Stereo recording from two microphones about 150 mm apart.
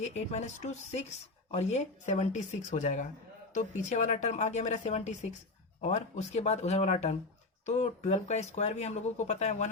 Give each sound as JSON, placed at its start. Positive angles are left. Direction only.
{"t": 0.0, "sound": "speech", "side_deg": 50}